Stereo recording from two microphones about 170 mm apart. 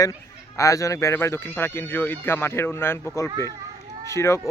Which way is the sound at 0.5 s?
20° left (ahead or behind).